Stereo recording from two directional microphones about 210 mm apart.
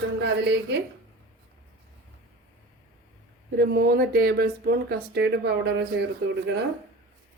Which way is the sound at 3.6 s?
50° right (ahead or behind).